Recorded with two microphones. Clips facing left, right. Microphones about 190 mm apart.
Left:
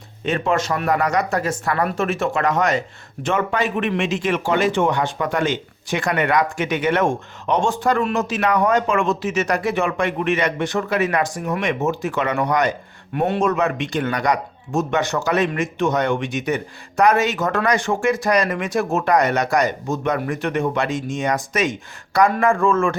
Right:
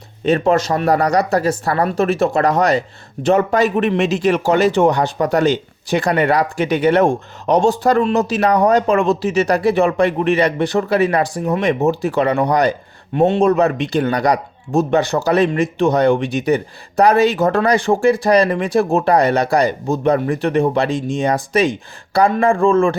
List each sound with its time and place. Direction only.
0.3 s speech: 35° right (ahead or behind)